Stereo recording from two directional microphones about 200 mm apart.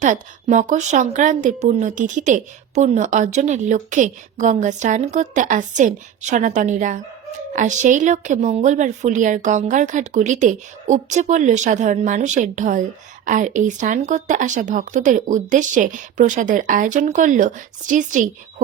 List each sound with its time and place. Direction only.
0.0 s a woman's voice: 40° right (ahead or behind)